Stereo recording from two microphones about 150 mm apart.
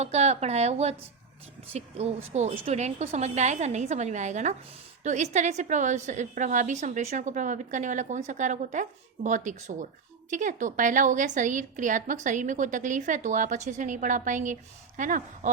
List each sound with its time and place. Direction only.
0.0 s a woman's voice: 45° right (ahead or behind)